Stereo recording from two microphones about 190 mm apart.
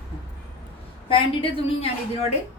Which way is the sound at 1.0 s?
30° left (ahead or behind).